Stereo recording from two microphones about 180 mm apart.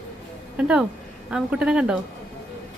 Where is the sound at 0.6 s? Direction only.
5° right (ahead or behind).